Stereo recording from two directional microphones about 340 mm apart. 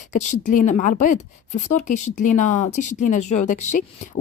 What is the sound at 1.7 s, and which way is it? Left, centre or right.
Speech, left.